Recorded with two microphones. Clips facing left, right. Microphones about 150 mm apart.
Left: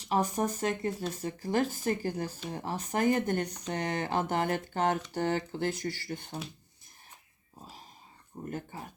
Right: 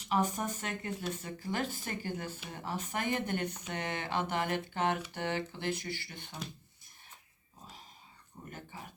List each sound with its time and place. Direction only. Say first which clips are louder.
0.0 s speech: left 3 dB; 40° left (ahead or behind)
8.4 s speech: left 9 dB; 40° left (ahead or behind)